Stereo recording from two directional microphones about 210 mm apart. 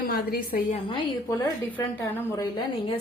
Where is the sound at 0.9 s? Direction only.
20° left (ahead or behind).